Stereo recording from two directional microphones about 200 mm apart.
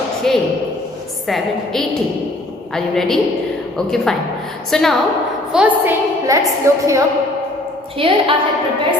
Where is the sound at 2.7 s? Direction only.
Centre (ahead or behind).